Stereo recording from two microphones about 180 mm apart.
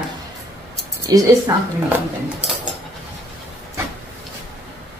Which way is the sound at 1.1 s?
20° right (ahead or behind).